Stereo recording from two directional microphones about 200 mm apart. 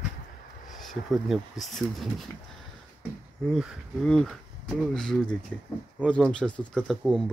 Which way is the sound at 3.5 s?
Centre (ahead or behind).